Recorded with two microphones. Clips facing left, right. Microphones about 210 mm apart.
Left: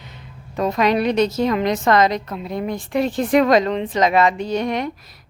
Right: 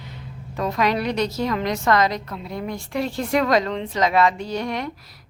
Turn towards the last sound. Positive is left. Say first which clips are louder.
# left 5 dB
turn(degrees=20)  # may be behind; listen again after turning